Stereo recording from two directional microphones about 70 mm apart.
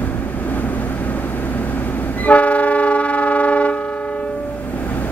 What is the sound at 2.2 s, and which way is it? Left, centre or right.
Train, centre.